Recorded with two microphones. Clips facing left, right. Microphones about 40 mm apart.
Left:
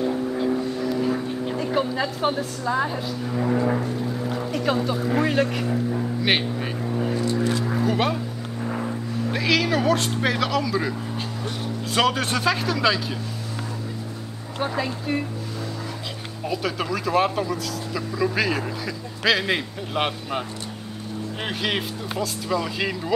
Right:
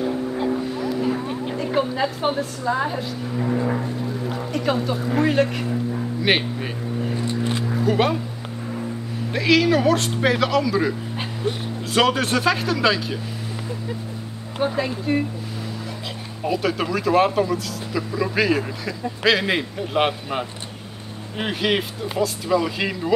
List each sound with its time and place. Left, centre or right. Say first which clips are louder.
0.0 s vehicle: even; centre
1.5 s speech: right 2 dB; centre
6.2 s vehicle: right 3 dB; centre
7.8 s speech: right 4 dB; centre
9.3 s speech: right 5 dB; centre
11.1 s vehicle: right 4 dB; right
11.9 s speech: right 3 dB; centre
14.6 s speech: right 3 dB; centre
16.4 s speech: right 4 dB; centre